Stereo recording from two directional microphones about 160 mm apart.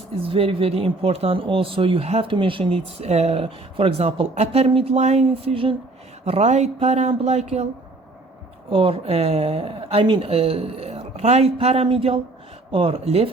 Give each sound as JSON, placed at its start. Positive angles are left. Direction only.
{"t": 0.2, "sound": "speech", "side_deg": -35}
{"t": 8.7, "sound": "speech", "side_deg": -35}